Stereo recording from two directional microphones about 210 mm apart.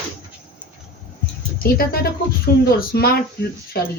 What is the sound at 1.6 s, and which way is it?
Speech, 45° left (ahead or behind).